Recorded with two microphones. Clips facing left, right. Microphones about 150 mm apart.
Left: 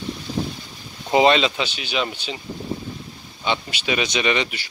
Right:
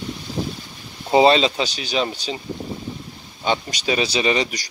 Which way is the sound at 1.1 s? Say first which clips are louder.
Right 2 dB; 30° right (ahead or behind).